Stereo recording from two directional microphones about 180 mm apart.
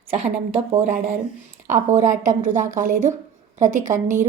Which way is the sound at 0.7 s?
40° right (ahead or behind).